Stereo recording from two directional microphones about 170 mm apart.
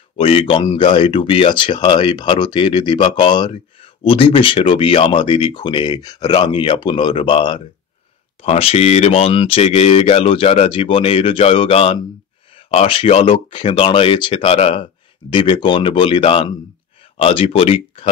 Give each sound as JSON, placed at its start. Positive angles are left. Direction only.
{"t": 0.2, "sound": "speech", "side_deg": 35}